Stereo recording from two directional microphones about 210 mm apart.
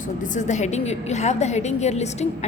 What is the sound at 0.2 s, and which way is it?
A woman's voice, 35° left (ahead or behind).